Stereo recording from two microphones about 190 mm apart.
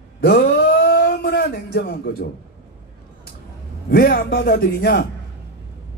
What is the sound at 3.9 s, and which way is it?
A man's voice, 55° left (ahead or behind).